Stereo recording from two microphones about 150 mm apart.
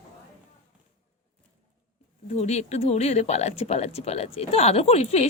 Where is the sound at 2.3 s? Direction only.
50° left (ahead or behind).